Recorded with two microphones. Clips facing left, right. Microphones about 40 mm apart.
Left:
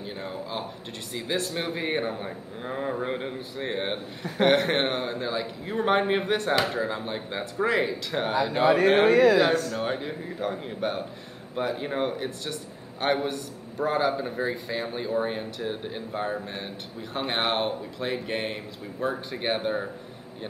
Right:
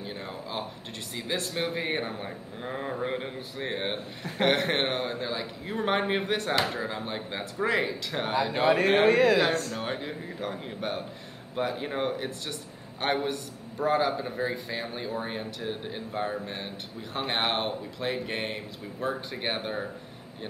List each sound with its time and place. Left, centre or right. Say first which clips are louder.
0.0 s a sound: left 3 dB; centre
1.1 s a man's voice: left 3 dB; centre
9.1 s speech: left 3 dB; right
9.8 s a man's voice: left 4 dB; centre